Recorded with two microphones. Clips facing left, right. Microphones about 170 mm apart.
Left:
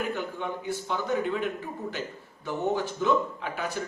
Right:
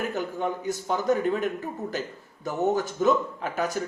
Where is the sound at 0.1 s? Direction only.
40° right (ahead or behind).